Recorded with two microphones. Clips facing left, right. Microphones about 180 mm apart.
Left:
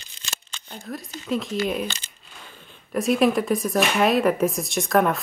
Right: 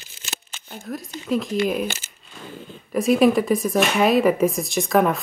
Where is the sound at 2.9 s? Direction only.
Centre (ahead or behind).